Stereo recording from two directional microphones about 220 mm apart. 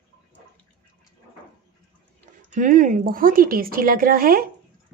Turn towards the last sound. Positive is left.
turn(degrees=-40)  # may be behind; listen again after turning